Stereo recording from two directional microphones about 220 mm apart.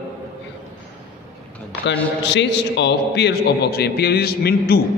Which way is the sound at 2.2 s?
55° left (ahead or behind).